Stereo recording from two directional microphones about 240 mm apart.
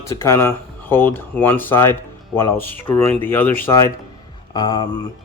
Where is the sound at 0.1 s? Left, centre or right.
Centre.